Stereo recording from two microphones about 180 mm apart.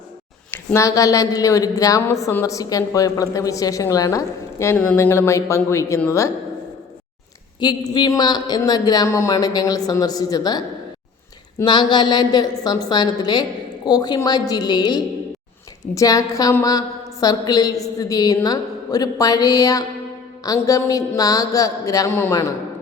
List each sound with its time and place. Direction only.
0.5 s a woman's voice: 15° left (ahead or behind)
7.6 s a woman's voice: 25° left (ahead or behind)
11.6 s a woman's voice: 25° left (ahead or behind)